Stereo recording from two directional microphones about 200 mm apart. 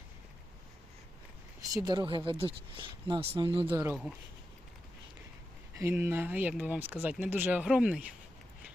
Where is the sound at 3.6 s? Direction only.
10° right (ahead or behind).